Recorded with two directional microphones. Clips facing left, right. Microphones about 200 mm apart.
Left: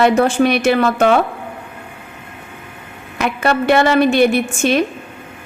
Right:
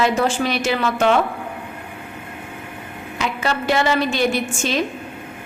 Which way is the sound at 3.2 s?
60° left (ahead or behind).